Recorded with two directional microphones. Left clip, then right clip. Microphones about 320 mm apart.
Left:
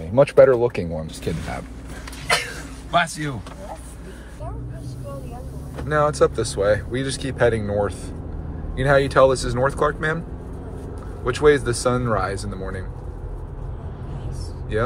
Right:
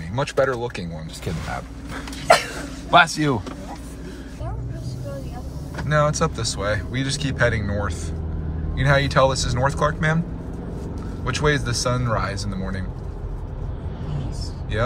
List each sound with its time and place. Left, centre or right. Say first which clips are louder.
0.1 s speech: left 8 dB; centre
2.9 s speech: right 6 dB; centre
5.9 s speech: left 2 dB; centre
11.2 s speech: left 5 dB; centre